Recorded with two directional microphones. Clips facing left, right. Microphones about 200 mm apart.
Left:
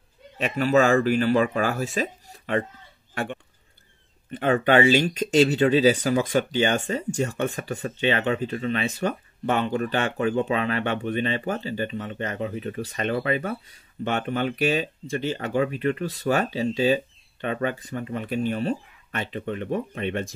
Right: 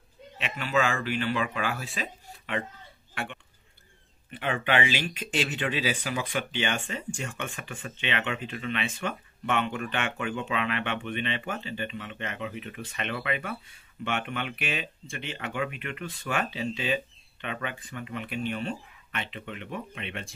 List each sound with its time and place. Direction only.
0.4 s speech: 40° left (ahead or behind)
4.3 s speech: 40° left (ahead or behind)